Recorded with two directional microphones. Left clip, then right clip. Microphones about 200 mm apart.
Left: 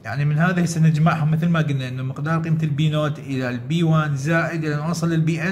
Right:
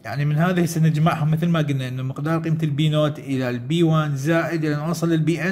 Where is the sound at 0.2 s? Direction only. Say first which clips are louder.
Even; 30° right (ahead or behind).